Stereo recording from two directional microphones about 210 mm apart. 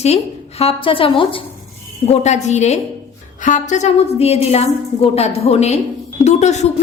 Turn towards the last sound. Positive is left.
turn(degrees=35)  # may be behind; listen again after turning